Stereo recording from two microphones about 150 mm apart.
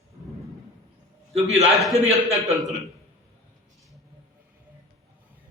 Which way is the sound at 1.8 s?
Centre (ahead or behind).